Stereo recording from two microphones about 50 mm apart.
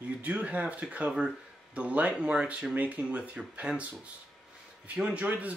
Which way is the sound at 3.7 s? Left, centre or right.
Centre.